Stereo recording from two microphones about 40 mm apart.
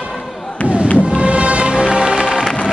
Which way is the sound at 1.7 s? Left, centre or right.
Centre.